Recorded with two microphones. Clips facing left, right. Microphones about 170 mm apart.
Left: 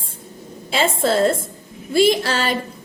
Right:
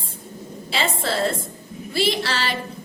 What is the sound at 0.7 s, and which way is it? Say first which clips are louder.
A woman's voice: left 6 dB; 45° left (ahead or behind).